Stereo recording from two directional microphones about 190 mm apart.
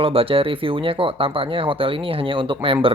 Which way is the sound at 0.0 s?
30° right (ahead or behind).